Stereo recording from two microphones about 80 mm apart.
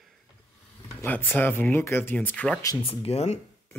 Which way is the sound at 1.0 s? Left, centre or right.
Left.